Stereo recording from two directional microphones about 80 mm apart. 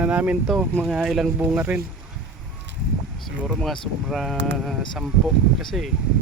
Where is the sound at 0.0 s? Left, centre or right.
Centre.